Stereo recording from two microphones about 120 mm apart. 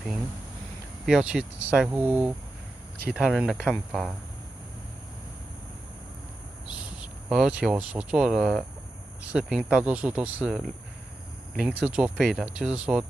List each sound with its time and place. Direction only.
1.0 s speech: 5° right (ahead or behind)
3.1 s speech: 5° right (ahead or behind)
6.7 s speech: 10° right (ahead or behind)